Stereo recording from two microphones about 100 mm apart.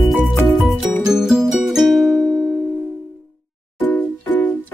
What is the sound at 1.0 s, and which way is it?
Music, 5° right (ahead or behind).